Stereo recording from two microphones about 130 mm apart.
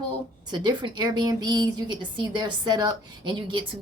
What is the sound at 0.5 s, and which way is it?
A woman's voice, 35° right (ahead or behind).